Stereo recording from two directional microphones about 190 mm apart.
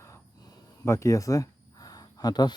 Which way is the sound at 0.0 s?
15° left (ahead or behind).